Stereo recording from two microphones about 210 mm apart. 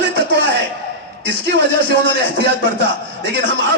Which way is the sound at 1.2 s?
55° right (ahead or behind).